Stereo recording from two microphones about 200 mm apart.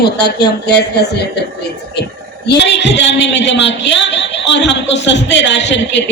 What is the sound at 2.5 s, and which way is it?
A woman's voice, 60° left (ahead or behind).